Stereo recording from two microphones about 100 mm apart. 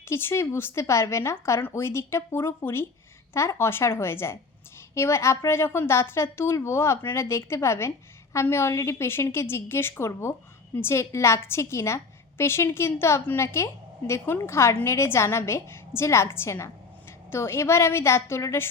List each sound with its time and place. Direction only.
0.0 s a woman's voice: 25° left (ahead or behind)